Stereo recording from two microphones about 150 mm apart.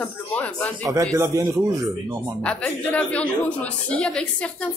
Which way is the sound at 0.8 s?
20° right (ahead or behind).